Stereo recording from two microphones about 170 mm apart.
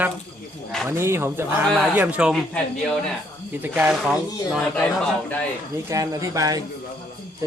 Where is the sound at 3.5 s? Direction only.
10° right (ahead or behind).